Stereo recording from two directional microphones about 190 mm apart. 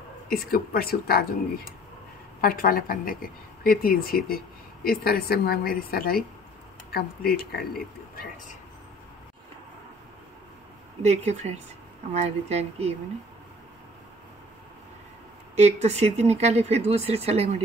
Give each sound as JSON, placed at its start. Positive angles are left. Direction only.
{"t": 0.3, "sound": "a woman's voice", "side_deg": 50}
{"t": 2.4, "sound": "a woman's voice", "side_deg": 50}
{"t": 11.0, "sound": "speech", "side_deg": -35}
{"t": 15.5, "sound": "speech", "side_deg": -35}